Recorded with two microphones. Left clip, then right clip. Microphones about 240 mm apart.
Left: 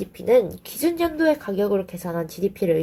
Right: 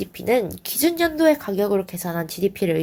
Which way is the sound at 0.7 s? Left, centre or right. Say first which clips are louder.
Right 2 dB; right.